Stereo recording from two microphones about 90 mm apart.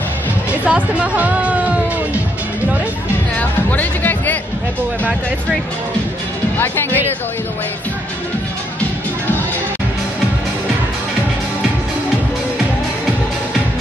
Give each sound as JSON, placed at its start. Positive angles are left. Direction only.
{"t": 0.5, "sound": "speech", "side_deg": -15}
{"t": 3.3, "sound": "speech", "side_deg": 20}
{"t": 6.6, "sound": "speech", "side_deg": 25}